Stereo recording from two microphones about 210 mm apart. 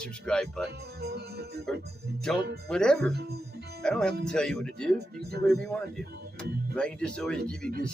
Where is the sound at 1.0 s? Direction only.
50° right (ahead or behind).